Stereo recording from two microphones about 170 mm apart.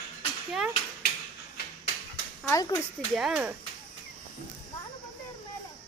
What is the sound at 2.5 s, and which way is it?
Speech, 20° left (ahead or behind).